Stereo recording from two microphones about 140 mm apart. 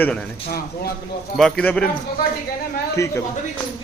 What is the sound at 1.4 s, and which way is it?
Speech, 5° left (ahead or behind).